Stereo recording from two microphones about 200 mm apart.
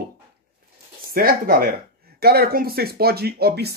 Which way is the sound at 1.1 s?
45° right (ahead or behind).